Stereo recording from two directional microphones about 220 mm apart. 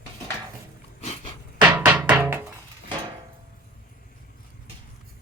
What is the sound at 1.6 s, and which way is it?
Music, 5° right (ahead or behind).